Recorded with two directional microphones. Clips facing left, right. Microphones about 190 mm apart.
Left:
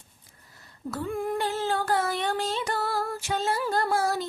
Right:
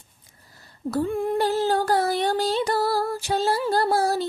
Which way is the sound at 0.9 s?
35° right (ahead or behind).